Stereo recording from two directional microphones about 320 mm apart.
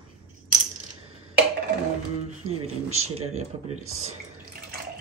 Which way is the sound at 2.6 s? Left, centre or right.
Centre.